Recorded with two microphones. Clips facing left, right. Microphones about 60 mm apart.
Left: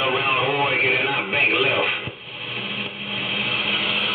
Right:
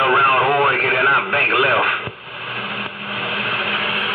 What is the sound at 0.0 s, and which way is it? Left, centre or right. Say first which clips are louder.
Radio: right 7 dB; right.